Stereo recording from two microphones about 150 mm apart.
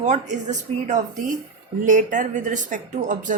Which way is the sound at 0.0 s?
55° right (ahead or behind).